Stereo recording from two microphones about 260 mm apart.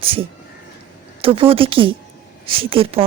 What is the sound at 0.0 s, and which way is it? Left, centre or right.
Speech, right.